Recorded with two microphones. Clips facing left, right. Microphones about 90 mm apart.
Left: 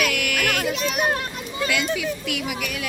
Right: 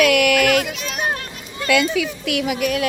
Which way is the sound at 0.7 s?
Centre (ahead or behind).